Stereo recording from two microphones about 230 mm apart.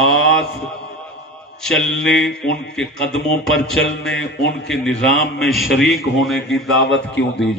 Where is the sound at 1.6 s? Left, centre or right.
Centre.